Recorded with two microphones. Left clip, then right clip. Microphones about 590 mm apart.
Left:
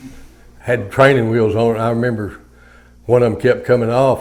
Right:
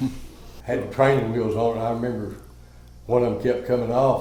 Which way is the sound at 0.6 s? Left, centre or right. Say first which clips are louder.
Left 8 dB; left.